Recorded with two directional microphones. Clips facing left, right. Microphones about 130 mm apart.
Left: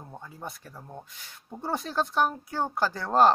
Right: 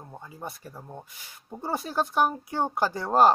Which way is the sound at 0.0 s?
5° right (ahead or behind).